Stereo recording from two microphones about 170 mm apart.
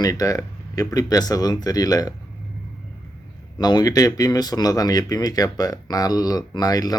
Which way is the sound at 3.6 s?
25° left (ahead or behind).